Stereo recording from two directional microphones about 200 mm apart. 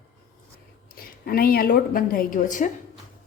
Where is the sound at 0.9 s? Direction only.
50° left (ahead or behind).